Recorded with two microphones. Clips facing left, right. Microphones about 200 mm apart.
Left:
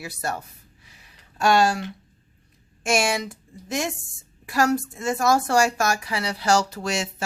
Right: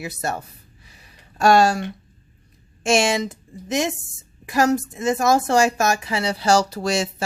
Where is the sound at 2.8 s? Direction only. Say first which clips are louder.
Right 4 dB; 25° right (ahead or behind).